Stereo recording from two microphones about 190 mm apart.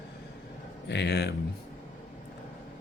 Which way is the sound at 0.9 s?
60° left (ahead or behind).